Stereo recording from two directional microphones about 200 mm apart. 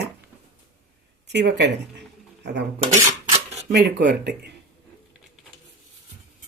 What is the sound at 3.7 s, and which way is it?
Speech, 60° right (ahead or behind).